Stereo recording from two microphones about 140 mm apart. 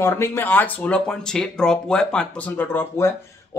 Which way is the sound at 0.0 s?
20° left (ahead or behind).